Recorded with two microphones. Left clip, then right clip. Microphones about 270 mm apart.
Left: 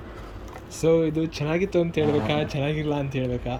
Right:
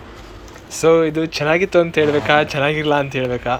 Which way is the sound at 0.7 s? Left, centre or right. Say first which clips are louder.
Right 8 dB; centre.